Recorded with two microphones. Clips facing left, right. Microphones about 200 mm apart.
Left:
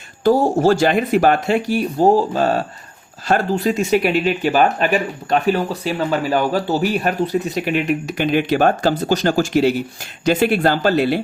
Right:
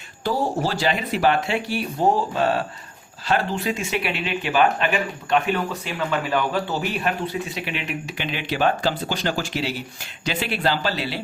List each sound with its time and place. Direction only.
0.3 s speech: 45° left (ahead or behind)